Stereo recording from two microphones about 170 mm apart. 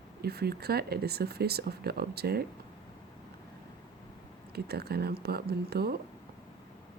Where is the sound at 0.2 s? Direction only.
70° right (ahead or behind).